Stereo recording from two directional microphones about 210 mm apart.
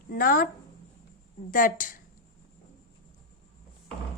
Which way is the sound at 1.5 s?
40° left (ahead or behind).